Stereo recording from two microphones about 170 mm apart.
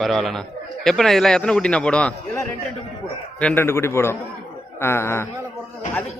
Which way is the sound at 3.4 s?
15° left (ahead or behind).